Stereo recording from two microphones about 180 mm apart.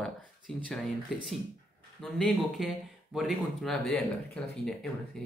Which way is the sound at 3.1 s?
Centre (ahead or behind).